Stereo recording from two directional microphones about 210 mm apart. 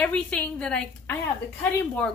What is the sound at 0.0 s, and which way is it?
A woman's voice, 5° left (ahead or behind).